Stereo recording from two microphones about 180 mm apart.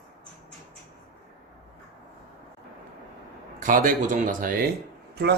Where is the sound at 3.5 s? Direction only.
45° right (ahead or behind).